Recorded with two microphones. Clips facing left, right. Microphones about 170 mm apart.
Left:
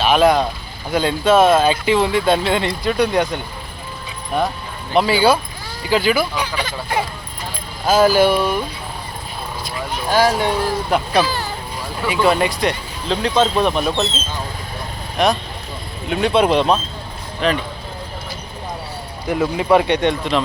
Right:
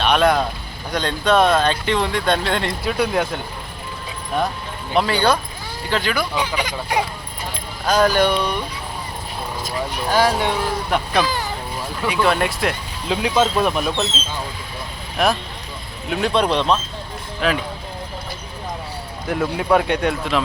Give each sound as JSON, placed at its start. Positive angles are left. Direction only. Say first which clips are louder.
{"t": 0.0, "sound": "speech", "louder": "left 3 dB", "side_deg": 5}
{"t": 4.9, "sound": "speech", "louder": "left 3 dB", "side_deg": 5}
{"t": 6.3, "sound": "speech", "louder": "right 1 dB", "side_deg": -20}
{"t": 7.9, "sound": "speech", "louder": "left 3 dB", "side_deg": 5}
{"t": 10.1, "sound": "speech", "louder": "left 2 dB", "side_deg": 5}
{"t": 15.2, "sound": "speech", "louder": "left 2 dB", "side_deg": -5}
{"t": 17.4, "sound": "speech", "louder": "left 2 dB", "side_deg": -5}
{"t": 19.3, "sound": "speech", "louder": "left 3 dB", "side_deg": 5}